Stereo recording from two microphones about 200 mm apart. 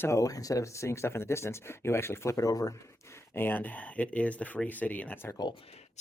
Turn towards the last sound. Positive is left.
turn(degrees=30)  # may be behind; listen again after turning